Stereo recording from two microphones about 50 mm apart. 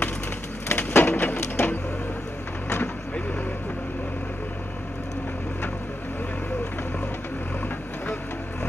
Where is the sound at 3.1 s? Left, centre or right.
Left.